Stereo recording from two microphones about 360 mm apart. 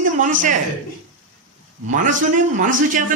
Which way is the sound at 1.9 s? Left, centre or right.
Right.